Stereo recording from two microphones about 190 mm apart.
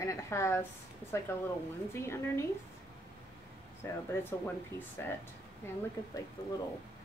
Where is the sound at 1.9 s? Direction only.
15° left (ahead or behind).